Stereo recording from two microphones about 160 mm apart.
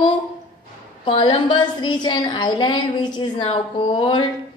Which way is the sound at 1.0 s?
30° left (ahead or behind).